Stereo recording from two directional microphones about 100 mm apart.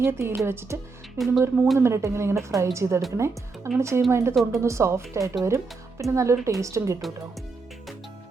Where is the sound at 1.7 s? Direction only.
30° right (ahead or behind).